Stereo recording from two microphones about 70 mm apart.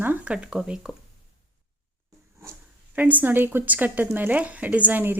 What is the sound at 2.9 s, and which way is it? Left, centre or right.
A woman's voice, right.